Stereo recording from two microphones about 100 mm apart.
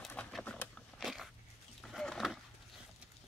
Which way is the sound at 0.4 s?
10° left (ahead or behind).